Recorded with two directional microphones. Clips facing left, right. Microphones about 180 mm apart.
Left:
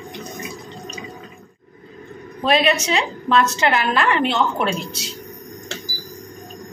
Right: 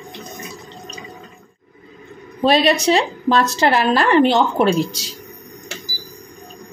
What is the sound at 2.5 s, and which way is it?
A woman's voice, 35° right (ahead or behind).